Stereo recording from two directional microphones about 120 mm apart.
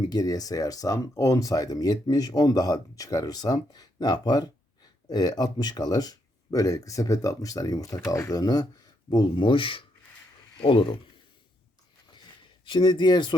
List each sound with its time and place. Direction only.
0.1 s speech: 30° left (ahead or behind); by 10.9 s 45° left (ahead or behind)
12.6 s speech: 40° left (ahead or behind)